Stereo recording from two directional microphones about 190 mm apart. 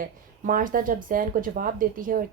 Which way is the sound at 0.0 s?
45° right (ahead or behind).